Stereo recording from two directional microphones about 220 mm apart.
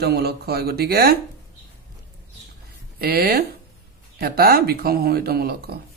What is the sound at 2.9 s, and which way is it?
Speech, 45° right (ahead or behind).